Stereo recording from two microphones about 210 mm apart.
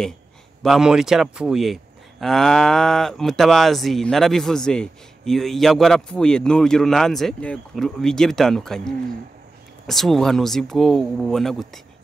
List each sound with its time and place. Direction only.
0.6 s speech: centre (ahead or behind)